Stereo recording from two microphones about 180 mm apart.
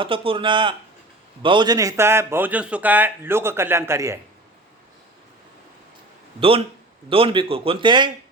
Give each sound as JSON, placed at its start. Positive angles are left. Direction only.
{"t": 0.0, "sound": "a man's voice", "side_deg": -30}
{"t": 7.1, "sound": "a man's voice", "side_deg": -30}